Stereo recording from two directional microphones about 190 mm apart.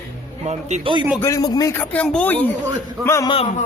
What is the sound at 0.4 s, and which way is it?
Speech, 35° right (ahead or behind).